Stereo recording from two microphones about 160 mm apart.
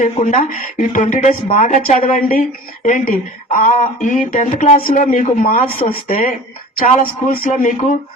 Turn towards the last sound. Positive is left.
turn(degrees=55)  # may be behind; listen again after turning